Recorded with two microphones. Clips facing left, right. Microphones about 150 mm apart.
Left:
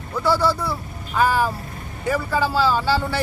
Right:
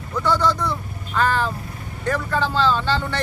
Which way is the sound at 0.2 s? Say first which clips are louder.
Even; 10° left (ahead or behind).